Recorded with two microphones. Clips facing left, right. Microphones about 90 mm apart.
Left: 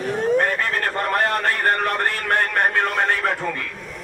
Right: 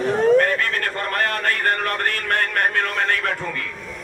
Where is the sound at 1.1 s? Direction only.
25° left (ahead or behind).